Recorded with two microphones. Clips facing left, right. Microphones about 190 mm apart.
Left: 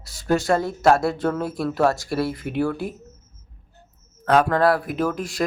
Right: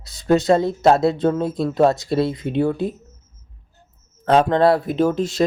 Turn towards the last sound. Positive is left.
turn(degrees=-25)  # may be behind; listen again after turning